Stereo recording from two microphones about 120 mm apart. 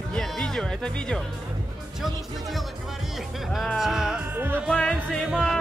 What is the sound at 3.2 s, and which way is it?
Speech, centre (ahead or behind).